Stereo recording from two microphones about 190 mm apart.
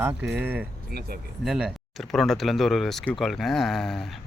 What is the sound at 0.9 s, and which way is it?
Speech, 55° right (ahead or behind).